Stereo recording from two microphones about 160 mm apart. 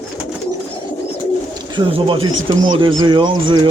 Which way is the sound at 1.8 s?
30° right (ahead or behind).